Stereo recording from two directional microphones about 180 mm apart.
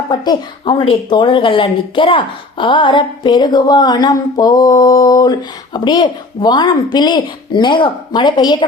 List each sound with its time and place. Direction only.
0.1 s speech: 25° left (ahead or behind)